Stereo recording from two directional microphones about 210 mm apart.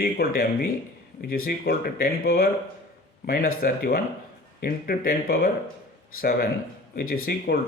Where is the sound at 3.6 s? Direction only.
45° left (ahead or behind).